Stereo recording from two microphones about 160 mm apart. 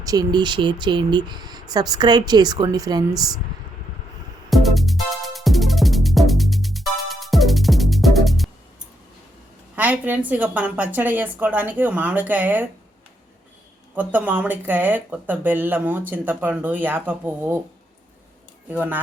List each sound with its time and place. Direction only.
0.0 s speech: 25° right (ahead or behind)
4.4 s music: centre (ahead or behind)
9.7 s speech: 10° right (ahead or behind)
13.9 s speech: 10° right (ahead or behind)
18.7 s speech: 10° right (ahead or behind)